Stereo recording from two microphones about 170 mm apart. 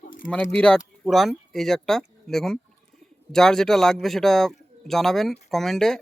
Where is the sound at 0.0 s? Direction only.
50° left (ahead or behind).